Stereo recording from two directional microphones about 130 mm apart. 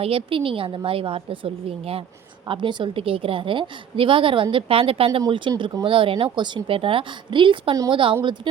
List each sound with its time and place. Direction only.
0.0 s a woman's voice: 45° right (ahead or behind)
2.5 s a woman's voice: 35° right (ahead or behind)